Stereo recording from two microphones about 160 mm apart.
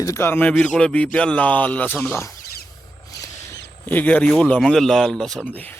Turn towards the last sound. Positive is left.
turn(degrees=10)  # may be behind; listen again after turning